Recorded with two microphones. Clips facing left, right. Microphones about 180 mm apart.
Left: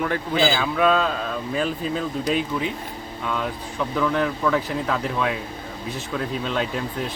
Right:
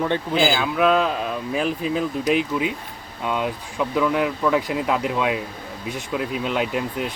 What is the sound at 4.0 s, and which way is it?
Speech, 10° right (ahead or behind).